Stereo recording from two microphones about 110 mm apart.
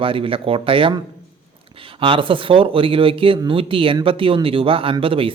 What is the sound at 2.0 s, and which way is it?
Speech, 50° right (ahead or behind).